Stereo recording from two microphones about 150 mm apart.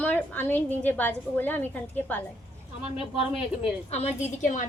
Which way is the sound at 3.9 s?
45° left (ahead or behind).